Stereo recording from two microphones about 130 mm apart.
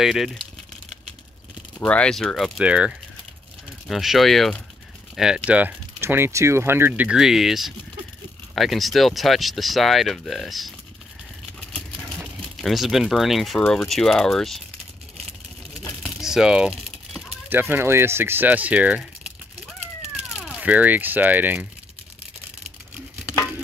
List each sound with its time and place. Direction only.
0.0 s speech: centre (ahead or behind)
1.9 s speech: 5° left (ahead or behind)
12.4 s speech: centre (ahead or behind)
16.0 s a sound: 5° right (ahead or behind)
17.5 s speech: 15° right (ahead or behind)
20.3 s speech: 5° right (ahead or behind)